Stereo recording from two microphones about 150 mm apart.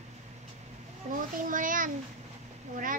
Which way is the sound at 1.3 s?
65° right (ahead or behind).